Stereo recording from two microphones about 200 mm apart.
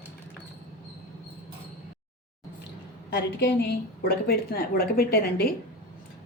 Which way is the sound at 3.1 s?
55° left (ahead or behind).